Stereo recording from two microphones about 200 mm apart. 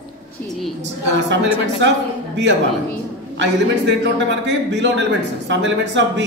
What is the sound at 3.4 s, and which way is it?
A man's voice, 65° right (ahead or behind).